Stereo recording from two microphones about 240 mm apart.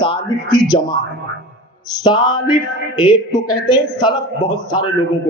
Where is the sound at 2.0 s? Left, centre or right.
Centre.